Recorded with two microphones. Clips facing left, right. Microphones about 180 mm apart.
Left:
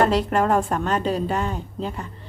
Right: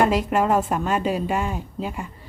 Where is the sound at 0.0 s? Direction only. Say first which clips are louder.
Even; 10° right (ahead or behind).